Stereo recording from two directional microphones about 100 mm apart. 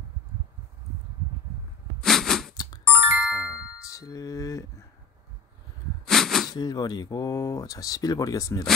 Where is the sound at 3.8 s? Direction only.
35° left (ahead or behind).